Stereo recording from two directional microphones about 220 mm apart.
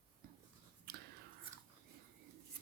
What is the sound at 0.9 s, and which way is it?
Whispering, 50° right (ahead or behind).